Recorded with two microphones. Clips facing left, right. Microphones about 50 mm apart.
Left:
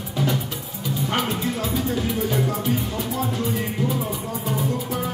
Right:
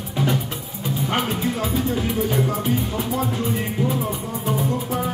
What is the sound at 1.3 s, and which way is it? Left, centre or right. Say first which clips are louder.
Music: right 2 dB; right.